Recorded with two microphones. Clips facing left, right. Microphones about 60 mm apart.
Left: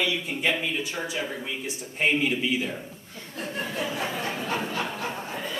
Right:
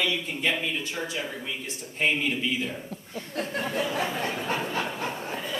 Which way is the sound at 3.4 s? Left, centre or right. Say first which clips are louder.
Right 2 dB; right.